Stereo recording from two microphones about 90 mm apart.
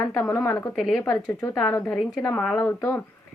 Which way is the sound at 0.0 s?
20° left (ahead or behind).